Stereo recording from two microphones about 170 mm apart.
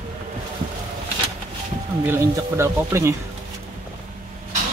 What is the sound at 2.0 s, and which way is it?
Speech, 15° right (ahead or behind).